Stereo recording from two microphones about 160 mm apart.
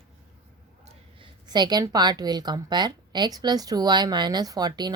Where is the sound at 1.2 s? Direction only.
30° right (ahead or behind).